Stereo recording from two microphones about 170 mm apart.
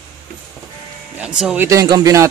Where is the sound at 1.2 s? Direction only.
5° right (ahead or behind).